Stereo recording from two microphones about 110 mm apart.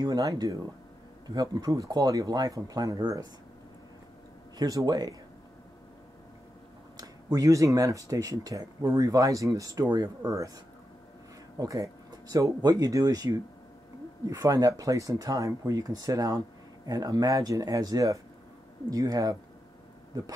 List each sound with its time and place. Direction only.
0.0 s speech: 30° right (ahead or behind)
4.6 s speech: 35° right (ahead or behind)
7.0 s speech: 35° right (ahead or behind)
11.5 s speech: 30° right (ahead or behind)